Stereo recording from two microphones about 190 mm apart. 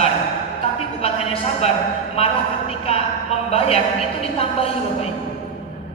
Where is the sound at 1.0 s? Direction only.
30° left (ahead or behind).